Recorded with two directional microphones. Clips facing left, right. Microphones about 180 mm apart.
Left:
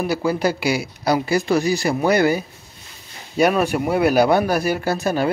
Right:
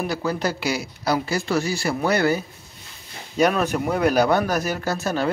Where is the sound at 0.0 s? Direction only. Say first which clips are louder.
Left 4 dB; 10° left (ahead or behind).